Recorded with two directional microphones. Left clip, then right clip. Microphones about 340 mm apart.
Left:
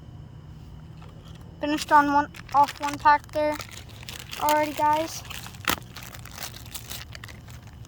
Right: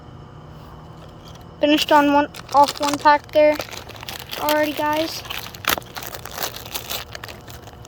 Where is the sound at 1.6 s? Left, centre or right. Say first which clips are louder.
Right 5 dB; centre.